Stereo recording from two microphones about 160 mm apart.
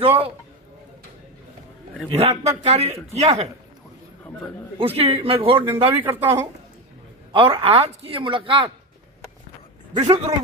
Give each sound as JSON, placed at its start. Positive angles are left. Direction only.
{"t": 2.0, "sound": "a man's voice", "side_deg": -40}
{"t": 4.8, "sound": "a man's voice", "side_deg": -35}
{"t": 6.0, "sound": "a woman's voice", "side_deg": -15}
{"t": 7.3, "sound": "a man's voice", "side_deg": -35}
{"t": 9.9, "sound": "a man's voice", "side_deg": -40}